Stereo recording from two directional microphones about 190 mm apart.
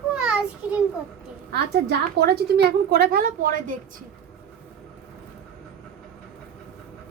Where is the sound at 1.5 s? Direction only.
60° right (ahead or behind).